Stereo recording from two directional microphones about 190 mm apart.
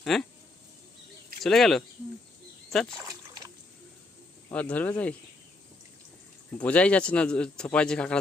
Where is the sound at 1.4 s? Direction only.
Centre (ahead or behind).